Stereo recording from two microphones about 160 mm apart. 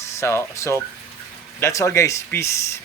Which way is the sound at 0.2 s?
15° left (ahead or behind).